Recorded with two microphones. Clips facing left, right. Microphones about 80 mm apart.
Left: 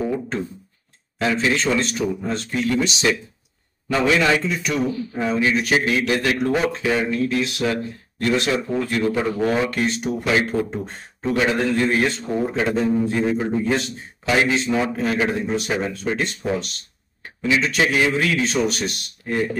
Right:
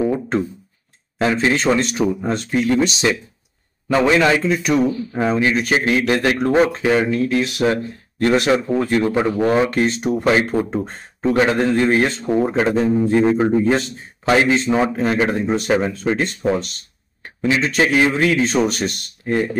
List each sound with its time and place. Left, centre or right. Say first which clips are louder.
1.1 s a man's voice: right 3 dB; right